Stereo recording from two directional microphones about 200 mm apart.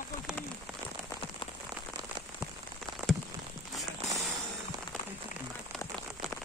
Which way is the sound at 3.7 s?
Centre (ahead or behind).